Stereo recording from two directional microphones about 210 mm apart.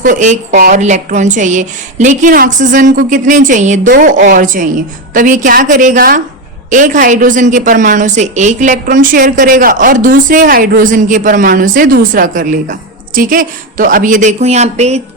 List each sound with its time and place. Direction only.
0.0 s a woman's voice: 35° right (ahead or behind)